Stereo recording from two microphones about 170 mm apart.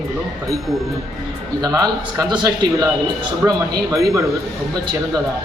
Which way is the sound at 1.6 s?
20° right (ahead or behind).